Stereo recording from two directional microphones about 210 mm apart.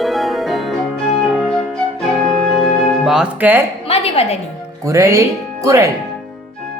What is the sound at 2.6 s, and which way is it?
Music, centre (ahead or behind).